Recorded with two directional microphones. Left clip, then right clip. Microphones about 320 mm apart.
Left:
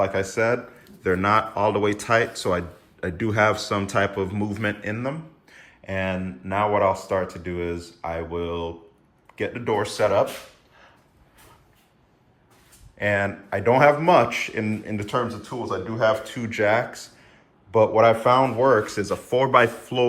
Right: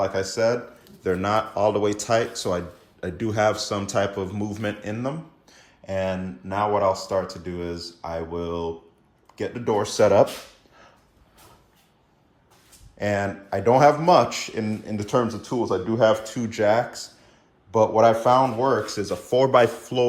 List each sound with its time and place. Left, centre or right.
0.3 s speech: centre; by 10.2 s right
13.0 s speech: centre